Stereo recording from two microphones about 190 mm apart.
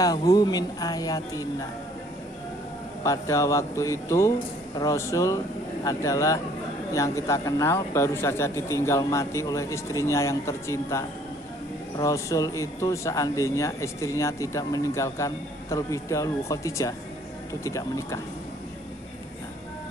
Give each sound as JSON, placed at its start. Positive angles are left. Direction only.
{"t": 0.0, "sound": "speech", "side_deg": 20}
{"t": 3.0, "sound": "speech", "side_deg": 15}